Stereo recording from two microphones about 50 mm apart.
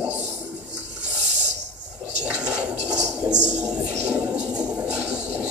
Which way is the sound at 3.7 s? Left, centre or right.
Centre.